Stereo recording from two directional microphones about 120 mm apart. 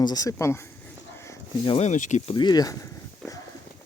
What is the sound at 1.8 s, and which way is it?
Speech, 90° left.